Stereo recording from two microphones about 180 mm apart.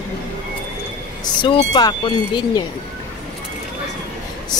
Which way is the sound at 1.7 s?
25° left (ahead or behind).